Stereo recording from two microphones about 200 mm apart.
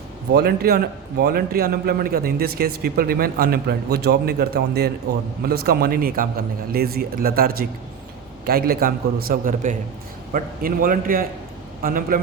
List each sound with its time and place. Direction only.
0.3 s speech: 50° right (ahead or behind)